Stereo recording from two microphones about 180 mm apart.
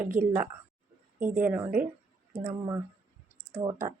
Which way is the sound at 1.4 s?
10° right (ahead or behind).